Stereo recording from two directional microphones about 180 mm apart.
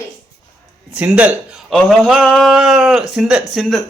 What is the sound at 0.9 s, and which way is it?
A man's voice, 10° right (ahead or behind).